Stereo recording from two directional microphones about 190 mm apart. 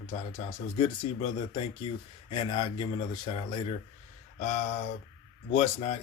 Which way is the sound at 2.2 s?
25° left (ahead or behind).